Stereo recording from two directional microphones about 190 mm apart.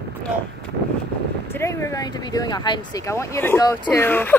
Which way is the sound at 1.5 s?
15° left (ahead or behind).